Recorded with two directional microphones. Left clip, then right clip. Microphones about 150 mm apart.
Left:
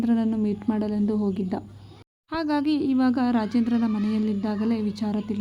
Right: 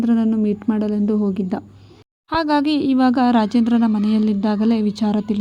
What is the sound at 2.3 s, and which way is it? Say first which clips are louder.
A woman's voice: right 7 dB; 40° right (ahead or behind).